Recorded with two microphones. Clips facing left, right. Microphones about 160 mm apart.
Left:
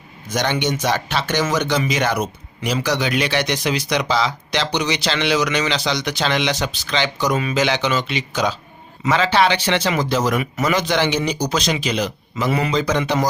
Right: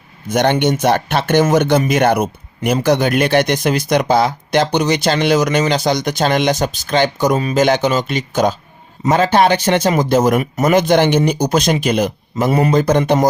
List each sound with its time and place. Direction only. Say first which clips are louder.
0.3 s speech: right 7 dB; 55° right (ahead or behind)